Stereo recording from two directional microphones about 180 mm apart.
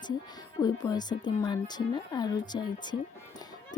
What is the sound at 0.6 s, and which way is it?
A woman's voice, 25° left (ahead or behind).